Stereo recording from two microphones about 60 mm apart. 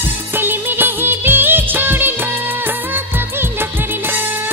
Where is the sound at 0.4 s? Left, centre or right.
Right.